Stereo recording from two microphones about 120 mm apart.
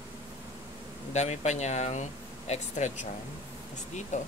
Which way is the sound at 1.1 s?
70° left (ahead or behind).